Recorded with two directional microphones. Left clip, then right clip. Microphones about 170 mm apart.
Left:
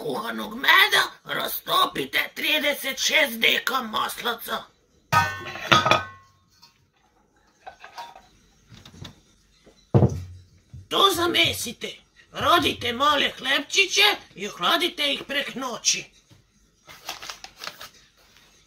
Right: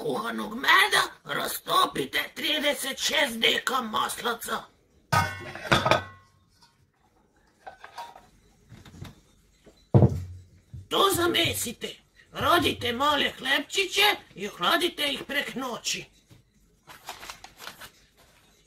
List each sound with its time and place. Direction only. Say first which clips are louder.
0.0 s a man's voice: left 1 dB; 5° right (ahead or behind)
5.1 s music: left 4 dB; 5° right (ahead or behind)
7.6 s dishes: left 2 dB; centre (ahead or behind)
10.9 s a man's voice: left 3 dB; centre (ahead or behind)
16.8 s a sound: left 5 dB; 20° left (ahead or behind)